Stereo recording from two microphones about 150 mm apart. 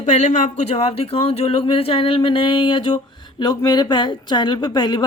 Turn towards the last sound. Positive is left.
turn(degrees=30)  # may be behind; listen again after turning